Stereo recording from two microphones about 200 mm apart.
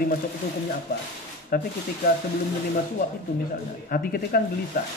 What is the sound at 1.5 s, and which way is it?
Speech, 45° left (ahead or behind).